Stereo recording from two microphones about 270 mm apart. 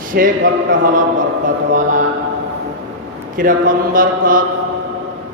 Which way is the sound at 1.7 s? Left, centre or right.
Right.